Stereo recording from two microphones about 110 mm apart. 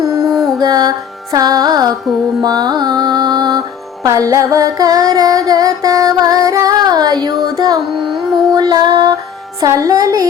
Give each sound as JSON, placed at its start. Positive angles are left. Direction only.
{"t": 0.0, "sound": "mantra", "side_deg": -30}
{"t": 0.6, "sound": "music", "side_deg": -35}